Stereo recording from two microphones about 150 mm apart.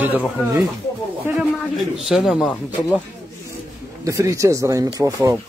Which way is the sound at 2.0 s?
Centre (ahead or behind).